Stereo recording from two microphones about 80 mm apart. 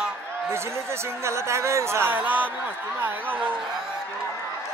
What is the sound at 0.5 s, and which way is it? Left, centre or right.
Speech, right.